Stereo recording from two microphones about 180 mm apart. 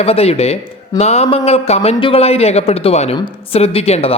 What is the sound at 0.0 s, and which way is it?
A man's voice, 35° left (ahead or behind).